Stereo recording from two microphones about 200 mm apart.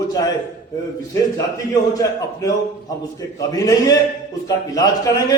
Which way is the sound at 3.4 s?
15° left (ahead or behind).